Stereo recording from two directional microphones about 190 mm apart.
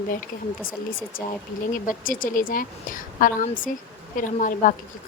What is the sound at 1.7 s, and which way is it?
A woman's voice, 45° left (ahead or behind).